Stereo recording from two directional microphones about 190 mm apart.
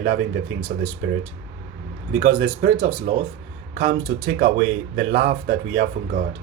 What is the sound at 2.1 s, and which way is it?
Speech, 65° right (ahead or behind).